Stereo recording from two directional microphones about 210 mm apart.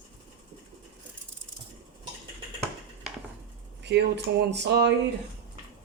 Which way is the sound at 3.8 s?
55° right (ahead or behind).